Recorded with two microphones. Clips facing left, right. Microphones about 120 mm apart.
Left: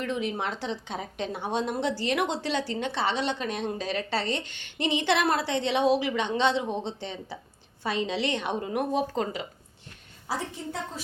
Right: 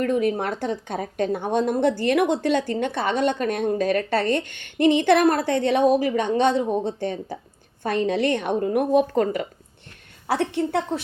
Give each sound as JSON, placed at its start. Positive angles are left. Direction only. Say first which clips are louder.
{"t": 0.0, "sound": "a woman's voice", "louder": "right 8 dB", "side_deg": -50}
{"t": 10.2, "sound": "a woman's voice", "louder": "right 10 dB", "side_deg": -70}